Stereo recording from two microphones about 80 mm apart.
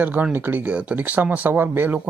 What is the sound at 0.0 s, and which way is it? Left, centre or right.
Speech, right.